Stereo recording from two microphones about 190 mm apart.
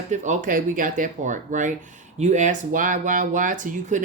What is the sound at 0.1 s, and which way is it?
Speech, 45° right (ahead or behind).